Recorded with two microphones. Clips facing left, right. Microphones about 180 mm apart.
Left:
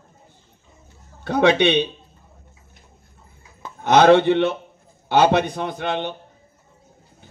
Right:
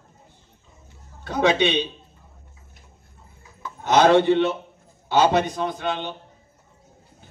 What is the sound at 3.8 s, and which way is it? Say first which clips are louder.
A man's voice: left 3 dB; 60° left (ahead or behind).